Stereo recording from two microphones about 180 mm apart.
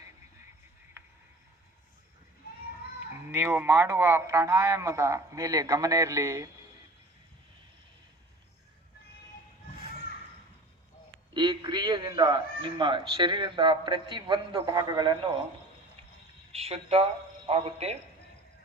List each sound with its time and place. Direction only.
3.2 s a man's voice: 10° right (ahead or behind)
11.3 s speech: 25° right (ahead or behind)
16.5 s speech: 35° right (ahead or behind)